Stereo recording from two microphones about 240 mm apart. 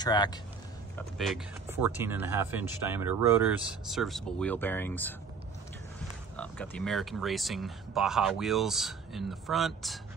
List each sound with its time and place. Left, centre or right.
0.0 s a man's voice: centre
0.9 s speech: centre
6.3 s speech: centre